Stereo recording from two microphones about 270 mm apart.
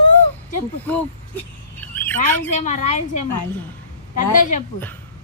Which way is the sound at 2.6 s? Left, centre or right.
Left.